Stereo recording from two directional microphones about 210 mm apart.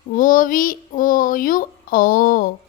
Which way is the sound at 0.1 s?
40° left (ahead or behind).